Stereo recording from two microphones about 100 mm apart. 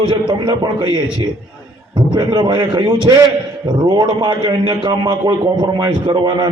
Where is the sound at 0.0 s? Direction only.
55° right (ahead or behind).